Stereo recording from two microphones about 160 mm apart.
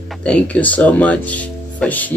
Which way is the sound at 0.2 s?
10° left (ahead or behind).